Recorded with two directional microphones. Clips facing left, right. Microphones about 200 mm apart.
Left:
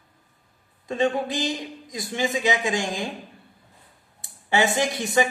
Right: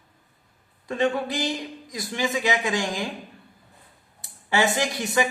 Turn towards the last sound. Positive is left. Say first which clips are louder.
# left 2 dB
turn(degrees=25)  # may be behind; listen again after turning